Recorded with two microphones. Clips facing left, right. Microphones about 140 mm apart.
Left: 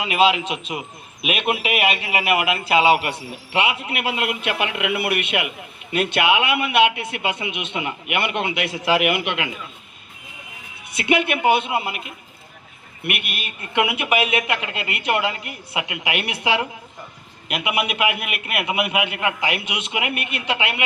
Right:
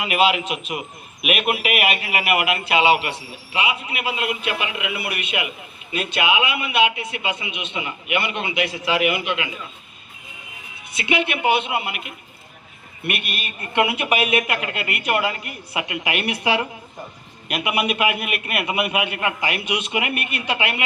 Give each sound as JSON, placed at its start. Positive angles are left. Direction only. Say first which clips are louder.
{"t": 0.0, "sound": "a man's voice", "louder": "left 1 dB", "side_deg": 25}
{"t": 10.9, "sound": "a woman's voice", "louder": "left 2 dB", "side_deg": 50}
{"t": 13.1, "sound": "speech", "louder": "even", "side_deg": 15}